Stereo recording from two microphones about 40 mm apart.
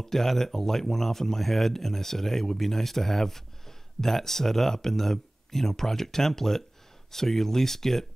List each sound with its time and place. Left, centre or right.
0.0 s speech: centre